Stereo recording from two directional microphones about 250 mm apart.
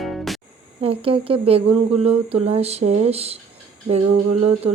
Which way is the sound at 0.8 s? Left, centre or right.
Right.